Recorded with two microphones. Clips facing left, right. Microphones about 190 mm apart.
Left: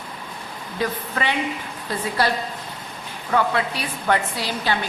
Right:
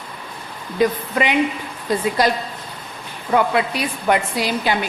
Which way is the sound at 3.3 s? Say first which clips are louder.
Right 4 dB; 15° right (ahead or behind).